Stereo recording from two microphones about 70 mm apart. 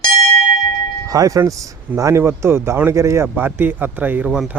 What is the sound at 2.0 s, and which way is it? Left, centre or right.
Speech, right.